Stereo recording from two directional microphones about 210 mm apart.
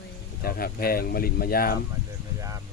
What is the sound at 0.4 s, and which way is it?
Speech, 45° left (ahead or behind).